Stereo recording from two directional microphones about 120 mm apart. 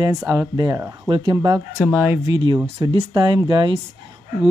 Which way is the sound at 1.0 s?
40° right (ahead or behind).